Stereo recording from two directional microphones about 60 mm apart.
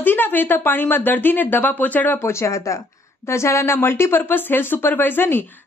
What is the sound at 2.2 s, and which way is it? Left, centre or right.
A woman's voice, left.